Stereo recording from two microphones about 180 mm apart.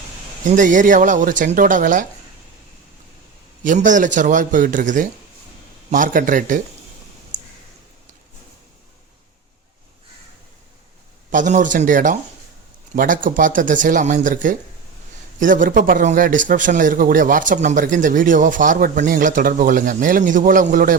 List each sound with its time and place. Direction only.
0.5 s speech: 45° right (ahead or behind)
3.6 s speech: 45° right (ahead or behind)
11.3 s speech: 45° right (ahead or behind)